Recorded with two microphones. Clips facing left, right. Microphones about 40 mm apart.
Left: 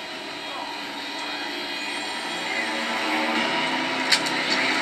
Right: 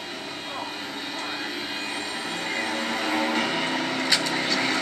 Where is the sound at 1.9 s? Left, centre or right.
Centre.